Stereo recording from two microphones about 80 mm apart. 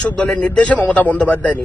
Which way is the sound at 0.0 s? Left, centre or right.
Centre.